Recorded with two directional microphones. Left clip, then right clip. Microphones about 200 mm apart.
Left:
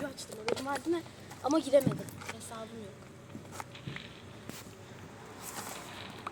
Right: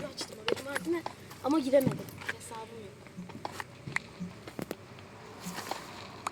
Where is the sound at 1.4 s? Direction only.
35° right (ahead or behind).